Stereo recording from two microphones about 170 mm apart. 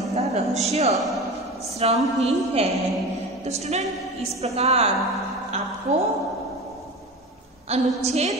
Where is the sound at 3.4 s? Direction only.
40° right (ahead or behind).